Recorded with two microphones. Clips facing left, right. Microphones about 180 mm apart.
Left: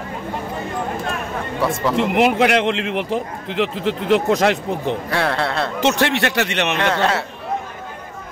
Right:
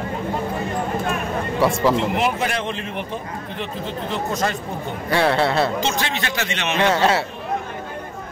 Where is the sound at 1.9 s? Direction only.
65° left (ahead or behind); by 5.0 s 90° left.